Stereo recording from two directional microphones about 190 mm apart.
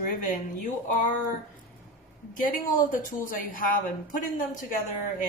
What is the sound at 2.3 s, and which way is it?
A woman's voice, 50° left (ahead or behind).